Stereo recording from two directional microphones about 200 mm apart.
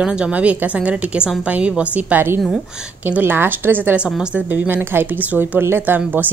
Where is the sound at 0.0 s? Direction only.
5° right (ahead or behind).